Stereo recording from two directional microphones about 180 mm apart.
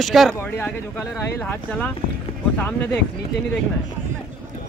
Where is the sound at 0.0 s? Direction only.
Centre (ahead or behind).